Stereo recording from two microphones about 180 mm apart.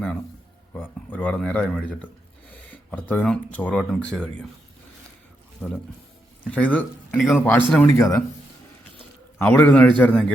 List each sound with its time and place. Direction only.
0.7 s speech: 10° left (ahead or behind)
5.5 s speech: centre (ahead or behind)
7.9 s speech: 15° left (ahead or behind)
9.4 s speech: 10° left (ahead or behind)